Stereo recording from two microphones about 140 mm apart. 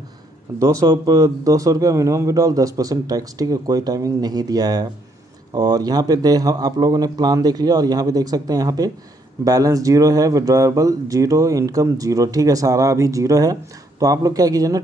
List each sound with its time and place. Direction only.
0.6 s speech: 25° right (ahead or behind)